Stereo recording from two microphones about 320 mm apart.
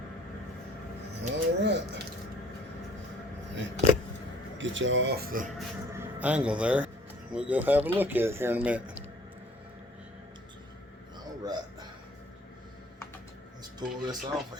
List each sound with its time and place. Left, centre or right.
1.2 s speech: right
3.5 s a sound: right
4.5 s speech: right
5.5 s speech: centre
13.7 s speech: centre